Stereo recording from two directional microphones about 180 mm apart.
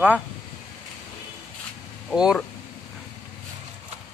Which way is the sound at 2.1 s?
5° right (ahead or behind).